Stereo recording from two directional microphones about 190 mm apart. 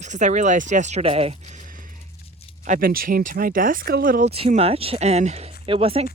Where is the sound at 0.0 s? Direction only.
40° right (ahead or behind).